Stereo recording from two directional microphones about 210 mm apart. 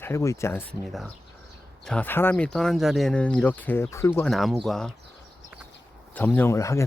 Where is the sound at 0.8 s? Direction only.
Centre (ahead or behind).